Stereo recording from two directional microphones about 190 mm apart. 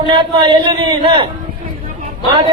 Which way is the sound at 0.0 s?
25° right (ahead or behind).